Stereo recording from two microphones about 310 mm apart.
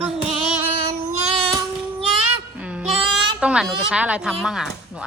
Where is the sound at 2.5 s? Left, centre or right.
Centre.